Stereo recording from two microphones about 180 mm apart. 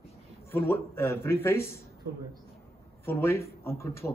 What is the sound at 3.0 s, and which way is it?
A man's voice, 10° left (ahead or behind).